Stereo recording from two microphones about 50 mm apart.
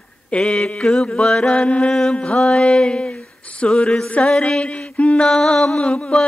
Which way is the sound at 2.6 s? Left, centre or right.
Centre.